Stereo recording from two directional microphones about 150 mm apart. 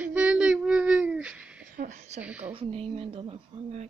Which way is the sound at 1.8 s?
50° right (ahead or behind).